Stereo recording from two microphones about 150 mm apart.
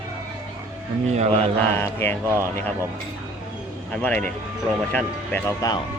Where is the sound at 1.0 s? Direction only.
45° right (ahead or behind).